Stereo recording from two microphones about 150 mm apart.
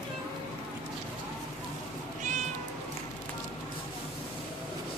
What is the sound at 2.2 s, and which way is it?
Cat, 55° right (ahead or behind).